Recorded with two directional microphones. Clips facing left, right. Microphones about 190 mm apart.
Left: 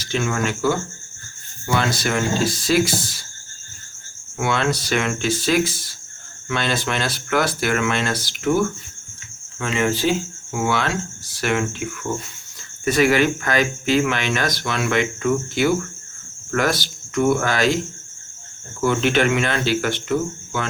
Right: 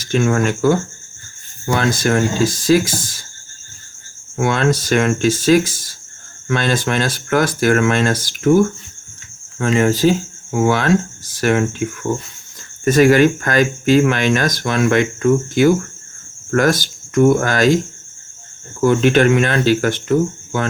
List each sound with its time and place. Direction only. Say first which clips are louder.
0.0 s speech: right 6 dB; 50° right (ahead or behind)
4.4 s speech: right 5 dB; 45° right (ahead or behind)
18.8 s speech: right 6 dB; 45° right (ahead or behind)